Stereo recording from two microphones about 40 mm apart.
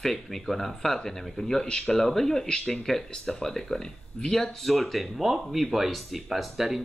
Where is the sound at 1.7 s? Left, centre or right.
Left.